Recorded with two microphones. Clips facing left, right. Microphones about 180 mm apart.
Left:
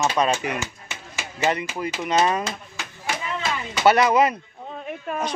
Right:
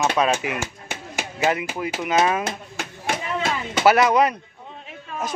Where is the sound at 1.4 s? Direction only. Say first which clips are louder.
Right 1 dB; centre (ahead or behind).